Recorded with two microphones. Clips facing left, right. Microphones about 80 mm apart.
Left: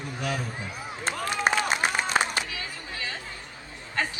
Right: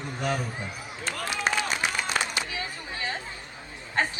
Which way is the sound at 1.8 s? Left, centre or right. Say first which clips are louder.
Left 3 dB; left.